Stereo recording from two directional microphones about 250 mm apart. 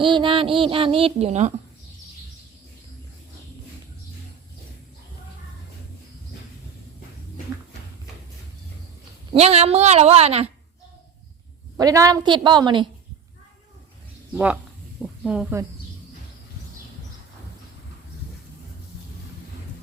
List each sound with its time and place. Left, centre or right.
0.0 s speech: centre
9.3 s speech: right
11.8 s a woman's voice: centre
14.3 s speech: centre